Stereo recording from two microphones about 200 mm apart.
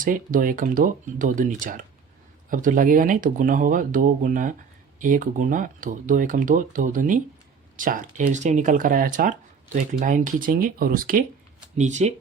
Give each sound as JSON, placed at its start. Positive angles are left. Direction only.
{"t": 0.0, "sound": "speech", "side_deg": -45}